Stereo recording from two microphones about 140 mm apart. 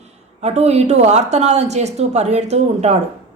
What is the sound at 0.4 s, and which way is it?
Speech, 50° right (ahead or behind).